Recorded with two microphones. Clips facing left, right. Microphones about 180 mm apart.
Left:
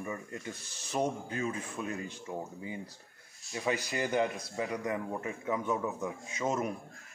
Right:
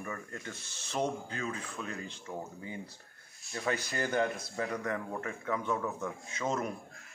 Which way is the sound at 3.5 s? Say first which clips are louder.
Left 1 dB; 15° left (ahead or behind).